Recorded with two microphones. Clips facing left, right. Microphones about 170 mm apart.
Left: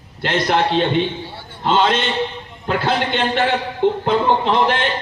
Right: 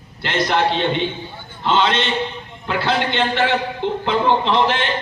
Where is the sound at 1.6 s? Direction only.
50° left (ahead or behind).